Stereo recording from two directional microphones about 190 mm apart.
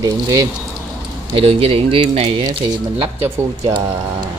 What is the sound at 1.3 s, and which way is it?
Speech, 30° right (ahead or behind).